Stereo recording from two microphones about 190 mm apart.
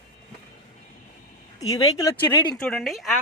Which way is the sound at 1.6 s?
20° left (ahead or behind).